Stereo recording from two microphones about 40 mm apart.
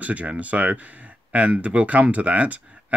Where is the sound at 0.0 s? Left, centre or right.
Right.